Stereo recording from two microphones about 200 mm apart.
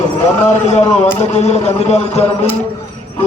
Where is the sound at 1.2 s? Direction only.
35° left (ahead or behind).